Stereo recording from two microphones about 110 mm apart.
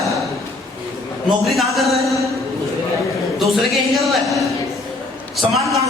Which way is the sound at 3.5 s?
Centre (ahead or behind).